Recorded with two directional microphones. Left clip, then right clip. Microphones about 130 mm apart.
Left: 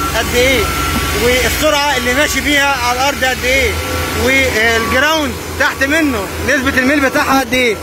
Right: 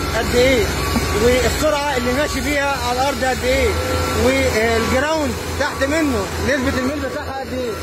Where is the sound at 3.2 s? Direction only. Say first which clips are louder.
Left 5 dB; 15° right (ahead or behind).